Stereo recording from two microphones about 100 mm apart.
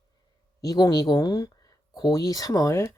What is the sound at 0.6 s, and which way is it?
Speech, 40° left (ahead or behind).